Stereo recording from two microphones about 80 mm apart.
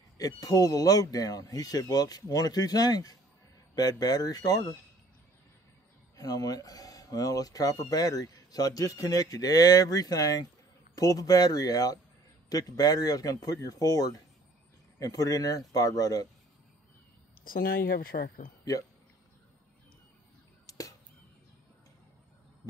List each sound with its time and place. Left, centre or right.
0.2 s speech: left
6.1 s speech: left
18.7 s speech: left
20.6 s chop: left